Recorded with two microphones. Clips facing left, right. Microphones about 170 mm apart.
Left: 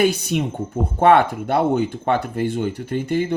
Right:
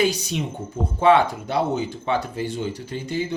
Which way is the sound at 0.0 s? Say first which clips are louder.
Left 4 dB; 55° left (ahead or behind).